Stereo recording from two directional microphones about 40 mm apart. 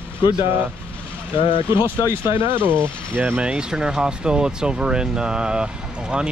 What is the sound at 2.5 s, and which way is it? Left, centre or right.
Speech, right.